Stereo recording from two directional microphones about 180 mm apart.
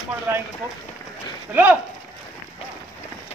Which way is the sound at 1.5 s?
10° right (ahead or behind).